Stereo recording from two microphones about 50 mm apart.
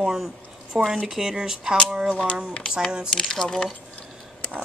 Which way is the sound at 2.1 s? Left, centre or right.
Left.